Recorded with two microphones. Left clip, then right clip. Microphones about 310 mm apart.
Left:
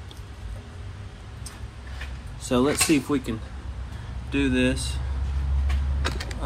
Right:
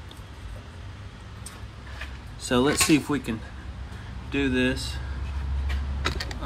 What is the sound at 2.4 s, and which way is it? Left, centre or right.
Speech, right.